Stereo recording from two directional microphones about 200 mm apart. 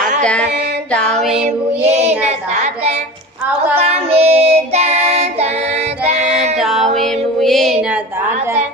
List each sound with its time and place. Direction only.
0.2 s child singing: 5° left (ahead or behind)
0.9 s music: 5° left (ahead or behind)
1.8 s child singing: 35° right (ahead or behind)
6.6 s music: centre (ahead or behind)